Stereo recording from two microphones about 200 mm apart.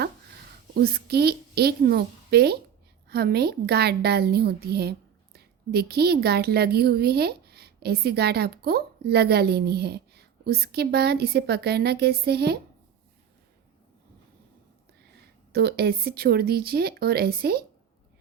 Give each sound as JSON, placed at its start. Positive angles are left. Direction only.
{"t": 0.0, "sound": "a woman's voice", "side_deg": -50}
{"t": 15.5, "sound": "a woman's voice", "side_deg": -50}